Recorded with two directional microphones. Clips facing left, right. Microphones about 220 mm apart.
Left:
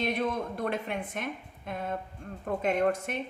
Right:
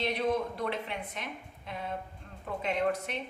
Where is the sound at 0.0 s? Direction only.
50° left (ahead or behind).